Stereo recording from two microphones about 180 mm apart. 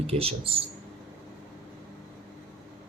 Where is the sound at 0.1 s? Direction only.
30° right (ahead or behind).